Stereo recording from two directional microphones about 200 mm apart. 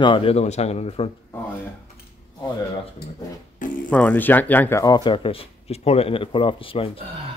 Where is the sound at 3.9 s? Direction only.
10° left (ahead or behind); by 6.9 s 25° left (ahead or behind).